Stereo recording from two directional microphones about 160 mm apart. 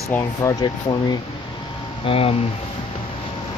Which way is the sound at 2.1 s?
35° left (ahead or behind).